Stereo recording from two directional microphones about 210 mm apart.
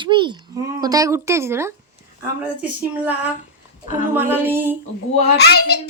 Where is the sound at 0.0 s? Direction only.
25° right (ahead or behind).